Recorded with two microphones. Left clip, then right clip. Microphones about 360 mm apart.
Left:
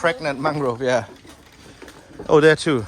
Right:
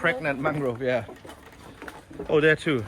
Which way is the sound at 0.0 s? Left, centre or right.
Centre.